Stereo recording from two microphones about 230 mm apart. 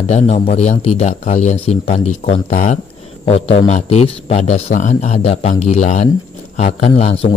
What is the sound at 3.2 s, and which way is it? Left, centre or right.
A man's voice, left.